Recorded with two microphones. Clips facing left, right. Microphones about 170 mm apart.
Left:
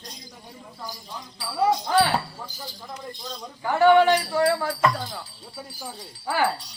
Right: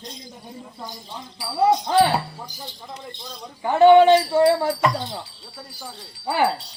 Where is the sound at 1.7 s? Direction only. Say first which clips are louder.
Right 3 dB; 20° right (ahead or behind).